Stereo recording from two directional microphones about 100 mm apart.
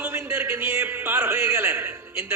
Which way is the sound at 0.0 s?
25° right (ahead or behind).